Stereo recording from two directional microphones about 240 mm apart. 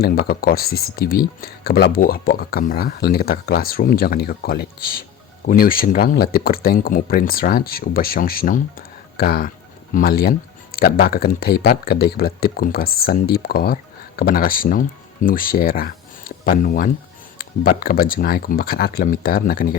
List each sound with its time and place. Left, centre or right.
0.0 s speech: left